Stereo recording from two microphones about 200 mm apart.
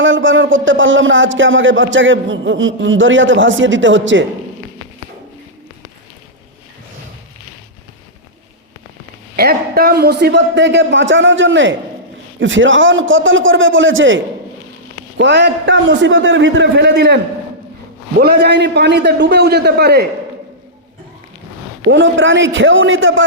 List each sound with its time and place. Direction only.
0.0 s a man's voice: 70° right (ahead or behind)
9.3 s a man's voice: 50° right (ahead or behind); by 14.2 s 70° right (ahead or behind)
15.2 s a man's voice: 60° right (ahead or behind)
18.2 s a man's voice: 50° right (ahead or behind)
21.8 s a man's voice: 65° right (ahead or behind)